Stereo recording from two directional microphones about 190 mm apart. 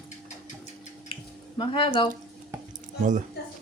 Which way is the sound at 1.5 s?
25° left (ahead or behind).